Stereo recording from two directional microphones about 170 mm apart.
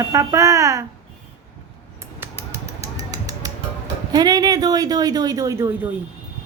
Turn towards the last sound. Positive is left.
turn(degrees=-15)  # may be behind; listen again after turning